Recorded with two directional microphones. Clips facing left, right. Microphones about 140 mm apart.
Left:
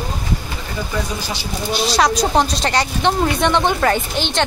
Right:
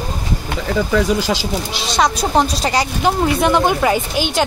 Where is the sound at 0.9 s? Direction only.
90° right.